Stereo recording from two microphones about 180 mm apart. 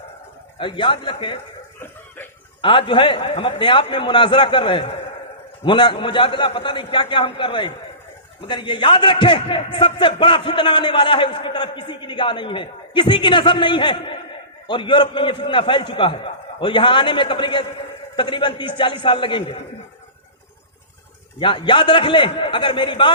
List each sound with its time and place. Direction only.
0.6 s a man's voice: 25° left (ahead or behind)
2.6 s a man's voice: 25° left (ahead or behind)
21.3 s a man's voice: 25° left (ahead or behind)